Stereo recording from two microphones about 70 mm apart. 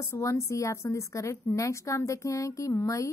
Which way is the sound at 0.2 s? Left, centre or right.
Left.